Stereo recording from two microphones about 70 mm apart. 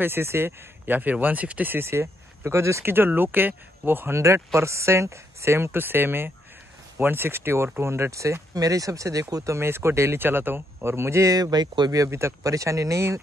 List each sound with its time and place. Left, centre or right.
0.0 s speech: right
1.9 s speech: right
4.2 s speech: right
11.3 s speech: right
12.0 s speech: right